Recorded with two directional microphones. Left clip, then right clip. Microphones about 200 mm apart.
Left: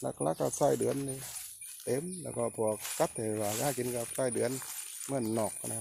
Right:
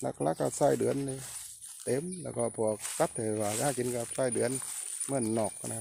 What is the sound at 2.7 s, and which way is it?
Speech, 10° right (ahead or behind).